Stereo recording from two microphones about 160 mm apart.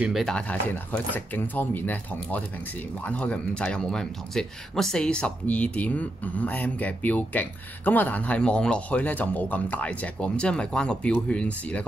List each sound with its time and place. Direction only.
0.0 s speech: centre (ahead or behind)